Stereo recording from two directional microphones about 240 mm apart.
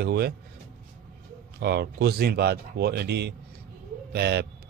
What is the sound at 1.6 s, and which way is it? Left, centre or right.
Speech, right.